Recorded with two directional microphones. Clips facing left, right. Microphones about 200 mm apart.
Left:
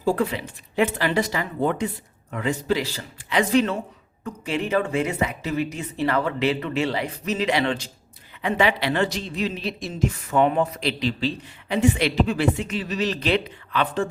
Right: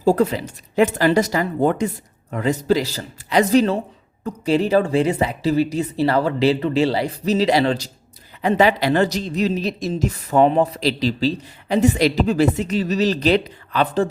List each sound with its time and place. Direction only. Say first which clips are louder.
0.0 s speech: right 6 dB; 40° right (ahead or behind)